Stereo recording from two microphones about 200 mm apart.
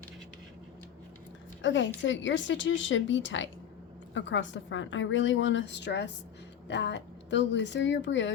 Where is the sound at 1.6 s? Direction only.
65° left (ahead or behind).